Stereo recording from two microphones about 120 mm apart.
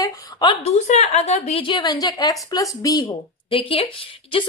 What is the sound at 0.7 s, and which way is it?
Speech, 70° left (ahead or behind).